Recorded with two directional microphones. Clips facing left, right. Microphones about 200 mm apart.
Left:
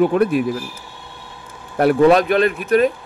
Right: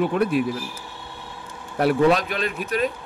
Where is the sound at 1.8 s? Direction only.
55° left (ahead or behind).